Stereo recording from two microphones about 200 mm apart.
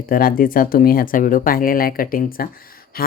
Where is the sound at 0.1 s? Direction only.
45° left (ahead or behind).